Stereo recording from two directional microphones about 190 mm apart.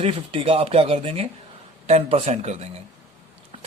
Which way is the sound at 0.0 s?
30° right (ahead or behind).